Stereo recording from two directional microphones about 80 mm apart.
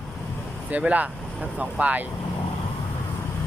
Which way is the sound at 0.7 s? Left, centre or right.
Centre.